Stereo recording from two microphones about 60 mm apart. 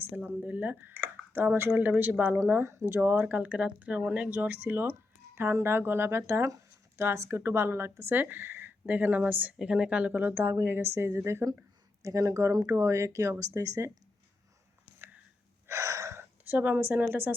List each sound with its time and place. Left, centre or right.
0.0 s speech: right
2.5 s speech: right
3.2 s a woman's voice: right
8.1 s a woman's voice: right; by 10.1 s centre
10.1 s speech: right
12.0 s speech: right
14.9 s a sound: right
15.6 s gasp: right
16.4 s a woman's voice: right